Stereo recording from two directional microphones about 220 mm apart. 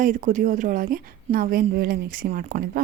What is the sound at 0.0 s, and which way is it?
Speech, 35° right (ahead or behind).